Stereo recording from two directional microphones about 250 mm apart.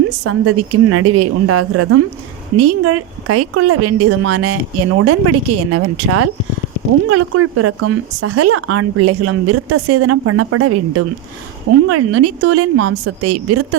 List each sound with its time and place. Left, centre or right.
0.3 s a woman's voice: right